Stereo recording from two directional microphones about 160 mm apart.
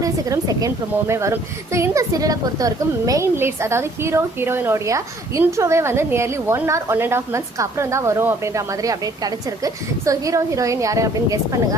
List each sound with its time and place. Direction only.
0.0 s a woman's voice: 20° right (ahead or behind)